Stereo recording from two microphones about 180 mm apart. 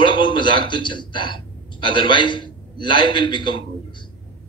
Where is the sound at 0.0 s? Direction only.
25° left (ahead or behind).